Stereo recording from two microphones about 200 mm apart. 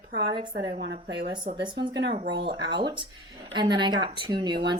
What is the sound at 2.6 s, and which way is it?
Speech, 25° right (ahead or behind).